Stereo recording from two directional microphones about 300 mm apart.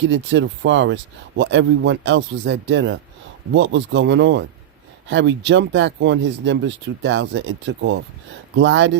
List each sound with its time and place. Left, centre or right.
0.0 s speech: right